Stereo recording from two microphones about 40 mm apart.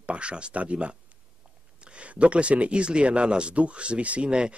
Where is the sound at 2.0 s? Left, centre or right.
Right.